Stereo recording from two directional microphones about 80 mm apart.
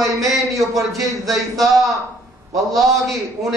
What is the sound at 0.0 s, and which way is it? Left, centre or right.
Speech, right.